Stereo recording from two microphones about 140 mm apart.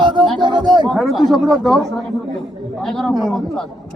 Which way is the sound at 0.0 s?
35° right (ahead or behind).